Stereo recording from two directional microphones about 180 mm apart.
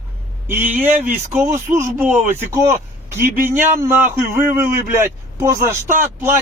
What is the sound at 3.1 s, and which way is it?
Speech, 10° right (ahead or behind).